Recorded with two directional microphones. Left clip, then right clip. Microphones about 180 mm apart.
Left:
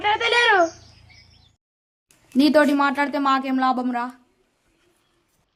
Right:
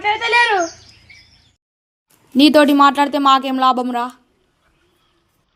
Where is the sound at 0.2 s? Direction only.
5° left (ahead or behind).